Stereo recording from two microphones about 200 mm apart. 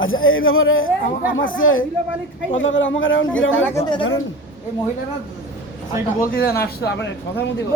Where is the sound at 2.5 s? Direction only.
70° left (ahead or behind).